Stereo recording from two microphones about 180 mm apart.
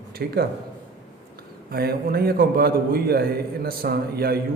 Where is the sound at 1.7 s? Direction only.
55° right (ahead or behind).